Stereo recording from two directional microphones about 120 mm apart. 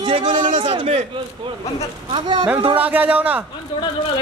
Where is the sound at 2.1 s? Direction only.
40° right (ahead or behind).